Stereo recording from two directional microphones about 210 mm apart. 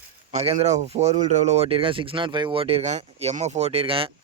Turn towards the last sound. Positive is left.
turn(degrees=-25)  # may be behind; listen again after turning